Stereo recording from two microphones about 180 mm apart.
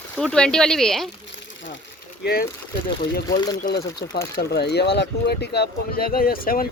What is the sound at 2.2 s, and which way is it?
Speech, 60° left (ahead or behind).